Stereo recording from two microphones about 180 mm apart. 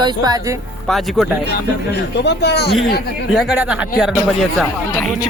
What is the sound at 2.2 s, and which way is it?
Speech, 70° left (ahead or behind).